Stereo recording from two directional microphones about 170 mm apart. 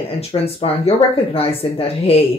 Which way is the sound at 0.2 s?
30° left (ahead or behind).